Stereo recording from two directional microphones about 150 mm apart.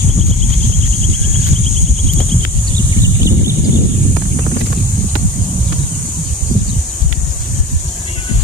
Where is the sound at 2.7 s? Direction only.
20° right (ahead or behind).